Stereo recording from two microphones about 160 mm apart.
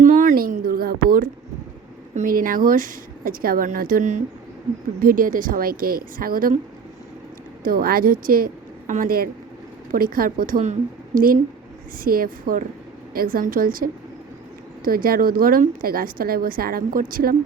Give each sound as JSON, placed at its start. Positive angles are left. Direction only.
{"t": 0.0, "sound": "a sound", "side_deg": -55}
{"t": 2.1, "sound": "a woman's voice", "side_deg": -60}
{"t": 7.6, "sound": "a woman's voice", "side_deg": -65}